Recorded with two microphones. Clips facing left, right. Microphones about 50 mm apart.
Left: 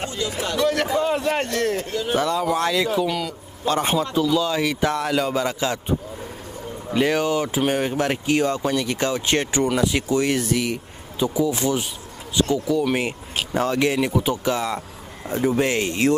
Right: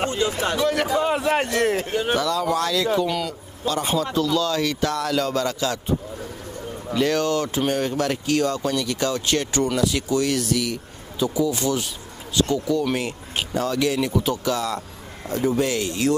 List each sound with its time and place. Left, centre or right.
0.0 s speech: right
0.6 s a man's voice: centre
1.9 s speech: right
2.1 s speech: left
2.9 s speech: centre
3.6 s a man's voice: left
3.9 s speech: centre
13.6 s speech: left